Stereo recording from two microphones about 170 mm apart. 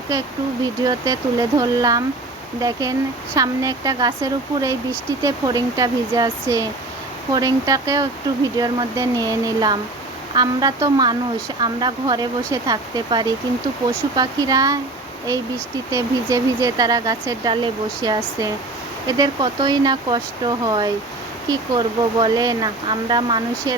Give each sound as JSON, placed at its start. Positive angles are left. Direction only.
{"t": 0.6, "sound": "speech", "side_deg": -20}
{"t": 15.9, "sound": "speech", "side_deg": -20}